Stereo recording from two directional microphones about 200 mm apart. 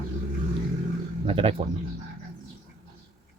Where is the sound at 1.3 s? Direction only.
30° right (ahead or behind).